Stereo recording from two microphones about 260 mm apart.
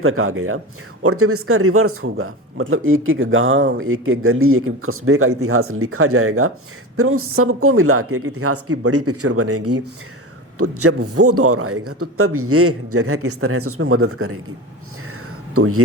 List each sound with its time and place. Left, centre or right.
0.0 s a man's voice: right
15.5 s a man's voice: right